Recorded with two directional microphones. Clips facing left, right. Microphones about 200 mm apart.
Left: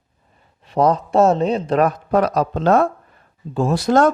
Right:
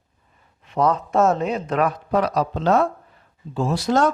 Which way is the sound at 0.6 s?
35° left (ahead or behind).